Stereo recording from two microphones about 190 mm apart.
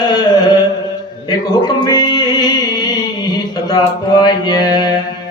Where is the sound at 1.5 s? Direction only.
20° left (ahead or behind).